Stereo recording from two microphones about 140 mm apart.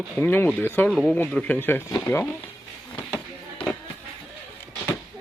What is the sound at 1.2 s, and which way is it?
Speech, 10° left (ahead or behind).